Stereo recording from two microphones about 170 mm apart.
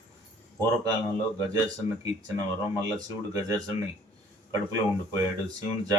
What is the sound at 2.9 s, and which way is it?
Speech, 20° right (ahead or behind).